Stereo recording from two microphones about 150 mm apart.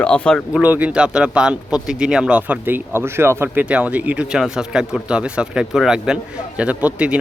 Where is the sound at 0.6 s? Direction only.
10° right (ahead or behind).